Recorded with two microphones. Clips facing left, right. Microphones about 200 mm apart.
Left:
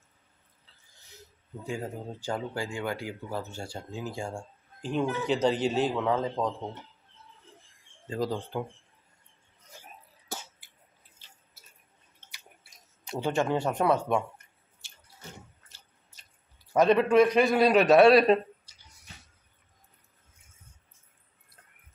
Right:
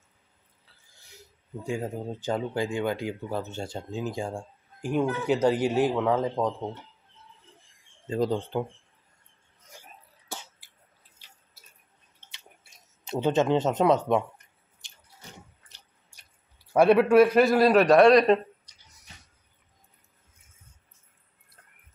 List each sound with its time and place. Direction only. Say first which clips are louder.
0.9 s speech: even; 10° right (ahead or behind)
8.1 s speech: right 4 dB; 25° right (ahead or behind)
10.2 s cough: left 1 dB; 45° left (ahead or behind)
11.2 s drip: right 1 dB; 15° right (ahead or behind)
13.0 s a sound: right 4 dB; 20° right (ahead or behind)
16.7 s a man's voice: right 3 dB; 10° right (ahead or behind); by 18.4 s 5° left (ahead or behind)